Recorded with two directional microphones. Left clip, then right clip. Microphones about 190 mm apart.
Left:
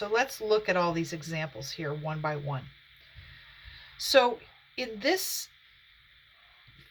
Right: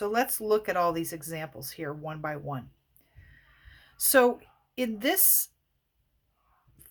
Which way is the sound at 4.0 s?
50° right (ahead or behind).